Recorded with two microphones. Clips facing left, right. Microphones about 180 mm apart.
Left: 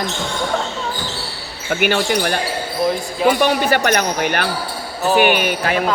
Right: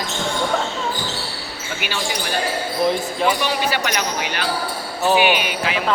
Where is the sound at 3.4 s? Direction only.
50° left (ahead or behind).